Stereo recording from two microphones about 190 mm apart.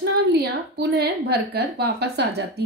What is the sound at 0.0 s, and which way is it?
A woman's voice, 55° right (ahead or behind).